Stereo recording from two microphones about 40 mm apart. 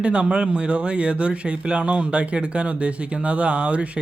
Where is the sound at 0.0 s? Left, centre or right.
Right.